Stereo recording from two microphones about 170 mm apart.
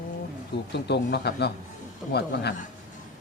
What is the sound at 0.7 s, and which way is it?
A man's voice, 80° left.